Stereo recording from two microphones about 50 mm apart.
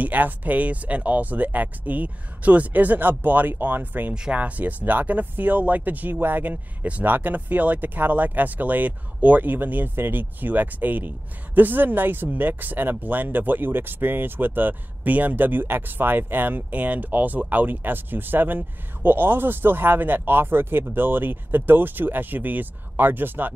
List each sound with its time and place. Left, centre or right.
0.0 s speech: right